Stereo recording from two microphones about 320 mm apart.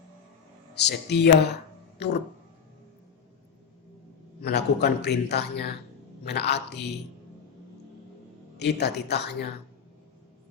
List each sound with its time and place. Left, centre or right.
0.7 s a man's voice: left
4.4 s a man's voice: left
8.5 s a man's voice: left